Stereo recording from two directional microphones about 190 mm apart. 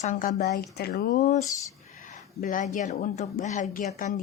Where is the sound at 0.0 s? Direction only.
40° left (ahead or behind).